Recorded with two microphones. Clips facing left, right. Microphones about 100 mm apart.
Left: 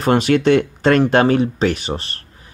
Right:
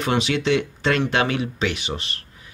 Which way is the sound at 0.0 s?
45° left (ahead or behind).